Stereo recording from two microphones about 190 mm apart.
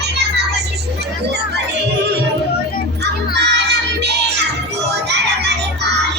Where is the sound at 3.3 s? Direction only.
65° right (ahead or behind).